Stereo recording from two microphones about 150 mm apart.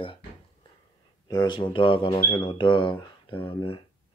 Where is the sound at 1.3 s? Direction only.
30° left (ahead or behind).